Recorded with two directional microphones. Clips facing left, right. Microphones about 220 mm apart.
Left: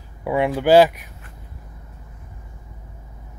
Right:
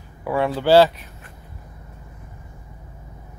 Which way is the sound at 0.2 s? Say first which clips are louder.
Left 2 dB; 15° left (ahead or behind).